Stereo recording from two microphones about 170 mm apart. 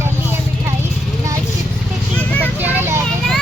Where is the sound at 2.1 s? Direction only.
10° left (ahead or behind).